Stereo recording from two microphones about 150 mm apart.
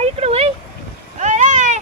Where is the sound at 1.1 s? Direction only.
55° right (ahead or behind).